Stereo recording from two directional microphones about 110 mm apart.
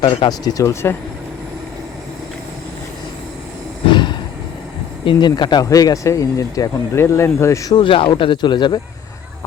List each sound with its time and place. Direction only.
0.3 s speech: 35° left (ahead or behind)
3.8 s a sound: 45° left (ahead or behind)
5.0 s speech: 45° left (ahead or behind)
5.6 s speech: 30° left (ahead or behind)
7.8 s speech: 50° left (ahead or behind)